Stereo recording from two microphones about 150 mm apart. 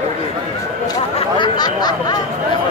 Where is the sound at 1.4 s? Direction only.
30° left (ahead or behind).